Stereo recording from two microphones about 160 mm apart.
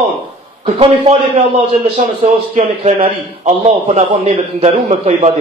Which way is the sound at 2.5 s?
40° right (ahead or behind).